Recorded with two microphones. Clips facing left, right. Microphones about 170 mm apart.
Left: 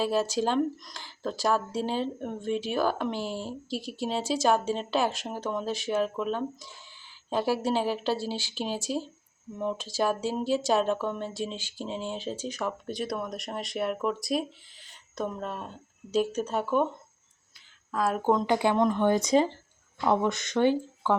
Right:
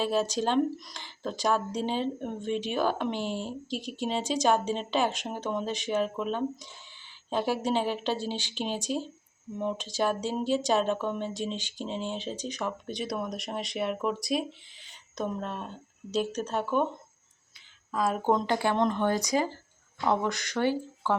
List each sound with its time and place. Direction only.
0.0 s speech: 5° left (ahead or behind)
17.9 s speech: 5° left (ahead or behind)
18.4 s speech: 15° left (ahead or behind)